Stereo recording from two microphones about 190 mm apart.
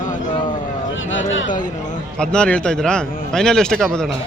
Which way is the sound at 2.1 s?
5° left (ahead or behind).